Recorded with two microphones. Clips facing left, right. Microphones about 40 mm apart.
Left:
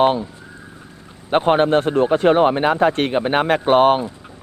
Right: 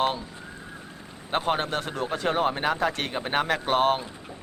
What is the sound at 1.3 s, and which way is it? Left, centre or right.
Speech, left.